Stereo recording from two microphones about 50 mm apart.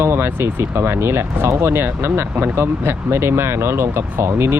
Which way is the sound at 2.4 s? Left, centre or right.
Right.